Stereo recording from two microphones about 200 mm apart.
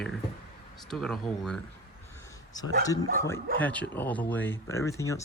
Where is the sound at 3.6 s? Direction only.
5° left (ahead or behind).